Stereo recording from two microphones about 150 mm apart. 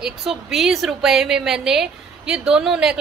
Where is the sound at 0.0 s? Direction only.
Centre (ahead or behind).